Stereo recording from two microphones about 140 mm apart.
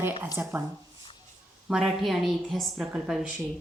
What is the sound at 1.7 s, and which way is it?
A woman's voice, 5° right (ahead or behind).